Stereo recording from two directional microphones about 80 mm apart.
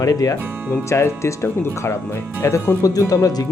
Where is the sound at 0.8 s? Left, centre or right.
Left.